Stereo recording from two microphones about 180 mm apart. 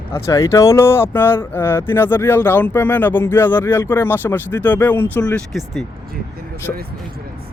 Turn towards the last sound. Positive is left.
turn(degrees=15)  # may be behind; listen again after turning